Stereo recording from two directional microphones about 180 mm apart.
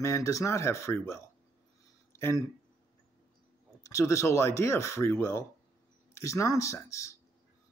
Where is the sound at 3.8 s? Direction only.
15° left (ahead or behind).